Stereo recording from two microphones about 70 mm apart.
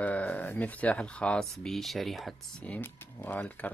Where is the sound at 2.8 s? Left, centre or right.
Left.